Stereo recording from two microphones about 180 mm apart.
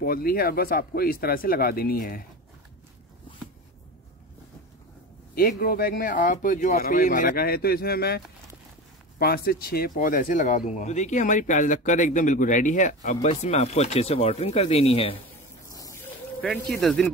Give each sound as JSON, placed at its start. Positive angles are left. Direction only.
{"t": 0.0, "sound": "speech", "side_deg": 55}
{"t": 5.3, "sound": "speech", "side_deg": 55}
{"t": 9.2, "sound": "speech", "side_deg": 55}
{"t": 16.7, "sound": "speech", "side_deg": 0}